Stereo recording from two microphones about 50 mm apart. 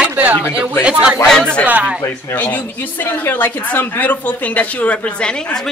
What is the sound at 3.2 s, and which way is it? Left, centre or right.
Speech, left.